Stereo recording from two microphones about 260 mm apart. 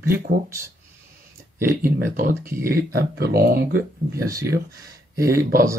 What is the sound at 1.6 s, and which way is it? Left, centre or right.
Speech, centre.